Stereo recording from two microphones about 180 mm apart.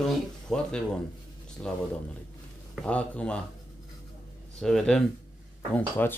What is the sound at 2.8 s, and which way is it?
Speech, 5° left (ahead or behind).